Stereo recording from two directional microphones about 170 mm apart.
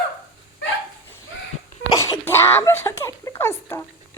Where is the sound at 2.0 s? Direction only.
15° left (ahead or behind).